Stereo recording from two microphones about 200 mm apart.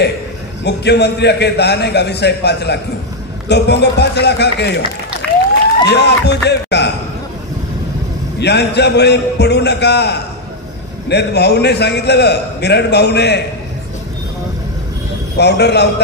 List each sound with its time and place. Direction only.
0.7 s a man's voice: 55° left (ahead or behind)
5.9 s a man's voice: 55° left (ahead or behind)
8.4 s a man's voice: 55° left (ahead or behind)
15.3 s a man's voice: 55° left (ahead or behind)